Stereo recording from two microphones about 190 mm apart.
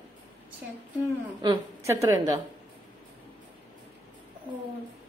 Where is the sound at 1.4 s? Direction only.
20° right (ahead or behind).